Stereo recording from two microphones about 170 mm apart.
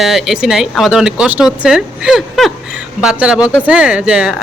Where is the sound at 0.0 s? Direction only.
Centre (ahead or behind).